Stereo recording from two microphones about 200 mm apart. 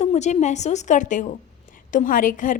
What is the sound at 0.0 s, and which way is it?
A woman's voice, 35° left (ahead or behind).